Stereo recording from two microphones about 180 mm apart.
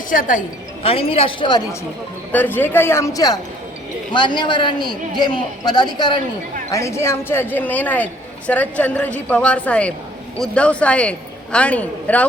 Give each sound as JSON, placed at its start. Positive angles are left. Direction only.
{"t": 0.1, "sound": "a woman's voice", "side_deg": 50}
{"t": 0.8, "sound": "a woman's voice", "side_deg": 30}
{"t": 2.3, "sound": "a woman's voice", "side_deg": 10}